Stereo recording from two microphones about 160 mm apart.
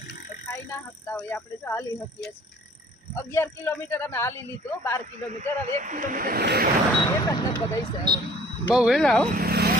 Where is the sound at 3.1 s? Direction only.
15° left (ahead or behind).